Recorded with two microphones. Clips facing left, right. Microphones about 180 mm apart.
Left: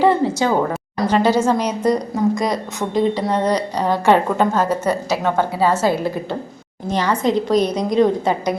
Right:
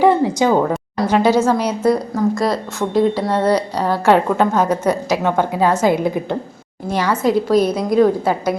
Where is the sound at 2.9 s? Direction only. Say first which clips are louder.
Right 2 dB; 5° right (ahead or behind).